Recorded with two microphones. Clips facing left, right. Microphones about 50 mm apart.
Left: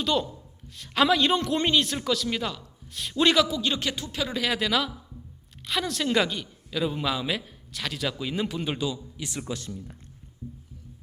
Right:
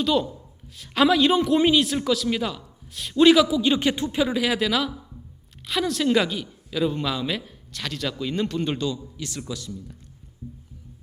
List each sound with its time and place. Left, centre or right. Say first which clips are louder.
0.0 s a man's voice: right 4 dB; centre
3.8 s speech: right 8 dB; right
4.4 s a man's voice: right 3 dB; centre
9.5 s speech: even; left